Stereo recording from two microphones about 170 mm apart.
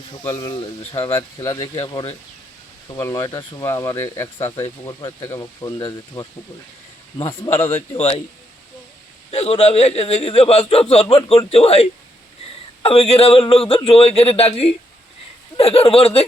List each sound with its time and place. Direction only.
0.1 s speech: 20° left (ahead or behind)
0.5 s a man's voice: 30° left (ahead or behind)
1.4 s a man's voice: 20° left (ahead or behind)
7.5 s a man's voice: 15° left (ahead or behind)
9.3 s a man's voice: 40° left (ahead or behind)